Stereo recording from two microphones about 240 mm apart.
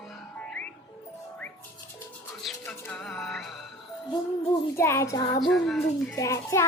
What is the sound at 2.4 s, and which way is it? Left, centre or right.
Music, centre.